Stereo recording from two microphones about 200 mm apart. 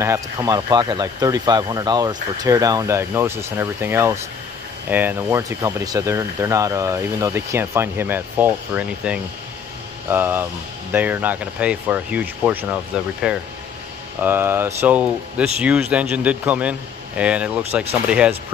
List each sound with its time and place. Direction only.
0.0 s speech: 15° right (ahead or behind)